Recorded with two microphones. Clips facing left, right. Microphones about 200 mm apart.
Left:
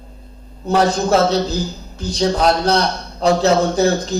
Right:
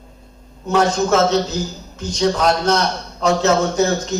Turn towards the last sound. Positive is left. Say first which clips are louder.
# left 2 dB
turn(degrees=35)  # may be behind; listen again after turning